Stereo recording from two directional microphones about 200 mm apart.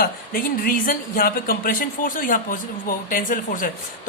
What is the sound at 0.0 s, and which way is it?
A woman's voice, 45° left (ahead or behind).